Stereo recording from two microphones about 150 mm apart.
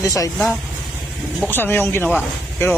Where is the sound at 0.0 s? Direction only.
20° left (ahead or behind).